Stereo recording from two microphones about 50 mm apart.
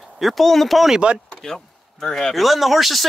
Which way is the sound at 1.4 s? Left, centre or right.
Centre.